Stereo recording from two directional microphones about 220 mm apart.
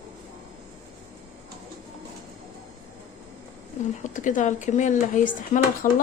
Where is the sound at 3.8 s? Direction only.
35° left (ahead or behind).